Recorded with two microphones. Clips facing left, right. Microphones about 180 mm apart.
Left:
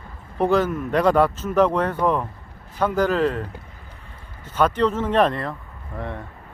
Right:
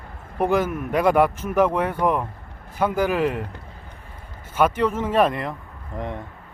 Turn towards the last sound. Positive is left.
turn(degrees=-20)  # may be behind; listen again after turning